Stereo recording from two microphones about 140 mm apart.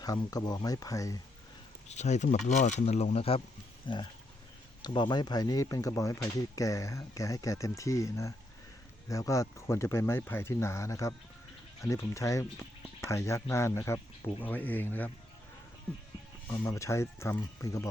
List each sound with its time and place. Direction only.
0.0 s speech: 25° left (ahead or behind)
1.9 s speech: 55° left (ahead or behind); by 15.1 s 15° left (ahead or behind)
16.5 s speech: 15° left (ahead or behind)